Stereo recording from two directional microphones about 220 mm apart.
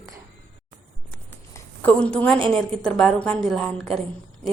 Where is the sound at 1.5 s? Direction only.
5° left (ahead or behind).